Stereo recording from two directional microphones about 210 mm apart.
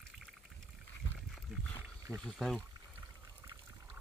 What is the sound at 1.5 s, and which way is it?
Wild animals, centre (ahead or behind).